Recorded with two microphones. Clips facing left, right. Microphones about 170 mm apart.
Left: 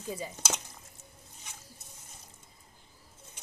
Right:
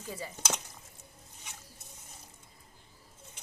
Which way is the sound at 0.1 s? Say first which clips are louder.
Left 3 dB; 15° left (ahead or behind).